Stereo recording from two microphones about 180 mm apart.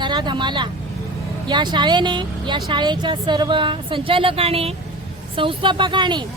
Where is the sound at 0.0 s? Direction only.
25° right (ahead or behind).